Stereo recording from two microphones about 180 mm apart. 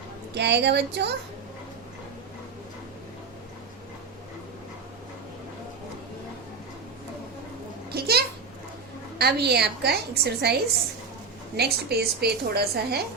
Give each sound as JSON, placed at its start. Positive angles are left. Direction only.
{"t": 0.3, "sound": "speech", "side_deg": -70}
{"t": 7.9, "sound": "a child's voice", "side_deg": -60}
{"t": 11.5, "sound": "a woman's voice", "side_deg": -65}